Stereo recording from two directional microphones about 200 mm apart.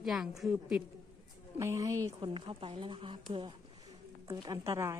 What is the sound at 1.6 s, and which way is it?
Speech, 15° right (ahead or behind).